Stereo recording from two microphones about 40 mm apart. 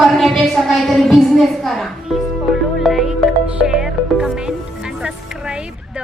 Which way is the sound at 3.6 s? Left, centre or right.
Centre.